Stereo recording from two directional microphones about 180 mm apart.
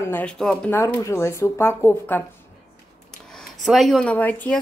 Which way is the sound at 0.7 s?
15° left (ahead or behind).